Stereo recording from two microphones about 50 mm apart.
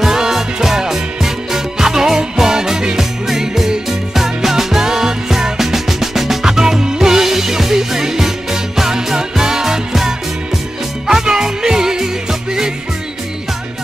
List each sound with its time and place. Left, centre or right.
0.0 s music: centre